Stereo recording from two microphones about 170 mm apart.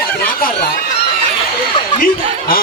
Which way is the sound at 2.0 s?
55° left (ahead or behind).